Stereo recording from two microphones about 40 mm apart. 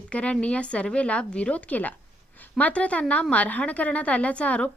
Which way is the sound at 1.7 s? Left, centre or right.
Left.